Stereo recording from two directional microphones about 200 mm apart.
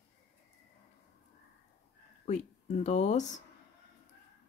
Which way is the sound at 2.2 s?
35° left (ahead or behind).